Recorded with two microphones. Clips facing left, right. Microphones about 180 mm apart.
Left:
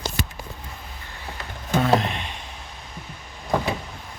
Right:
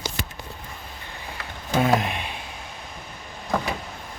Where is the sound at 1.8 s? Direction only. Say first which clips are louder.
Even; 10° right (ahead or behind).